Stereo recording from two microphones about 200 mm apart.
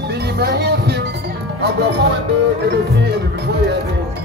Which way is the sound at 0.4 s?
55° right (ahead or behind).